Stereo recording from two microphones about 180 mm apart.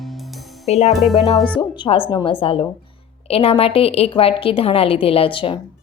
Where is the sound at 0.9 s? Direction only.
Centre (ahead or behind).